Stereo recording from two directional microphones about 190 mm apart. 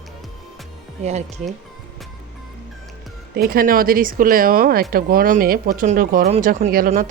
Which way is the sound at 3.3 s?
50° right (ahead or behind).